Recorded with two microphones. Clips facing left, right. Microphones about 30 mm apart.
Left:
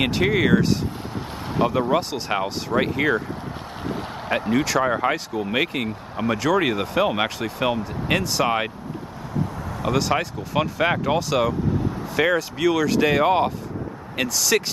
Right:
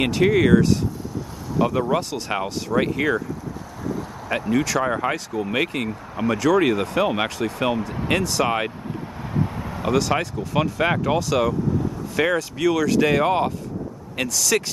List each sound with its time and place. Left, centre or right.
0.0 s speech: centre; by 3.2 s left
4.5 s speech: left
4.7 s speech: centre
9.9 s speech: centre